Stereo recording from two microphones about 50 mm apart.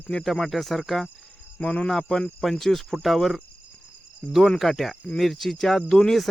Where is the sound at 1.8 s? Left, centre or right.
Centre.